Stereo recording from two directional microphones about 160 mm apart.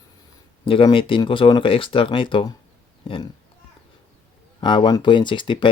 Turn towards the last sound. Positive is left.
turn(degrees=30)  # may be behind; listen again after turning